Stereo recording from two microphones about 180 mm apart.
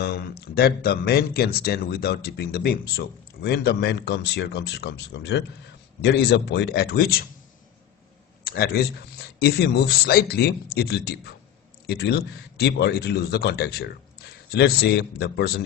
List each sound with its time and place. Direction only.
0.0 s speech: 60° left (ahead or behind)
8.4 s speech: 60° left (ahead or behind)